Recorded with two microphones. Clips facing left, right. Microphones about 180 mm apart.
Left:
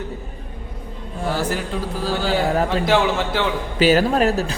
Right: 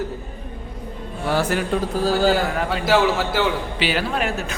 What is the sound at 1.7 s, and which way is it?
Speech, 60° right (ahead or behind).